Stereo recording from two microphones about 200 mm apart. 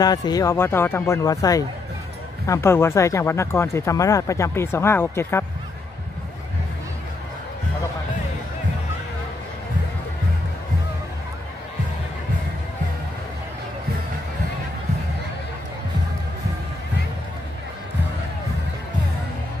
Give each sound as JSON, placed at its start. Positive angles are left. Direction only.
{"t": 0.0, "sound": "speech", "side_deg": 20}